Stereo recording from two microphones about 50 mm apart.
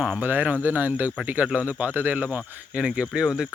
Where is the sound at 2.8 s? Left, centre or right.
Centre.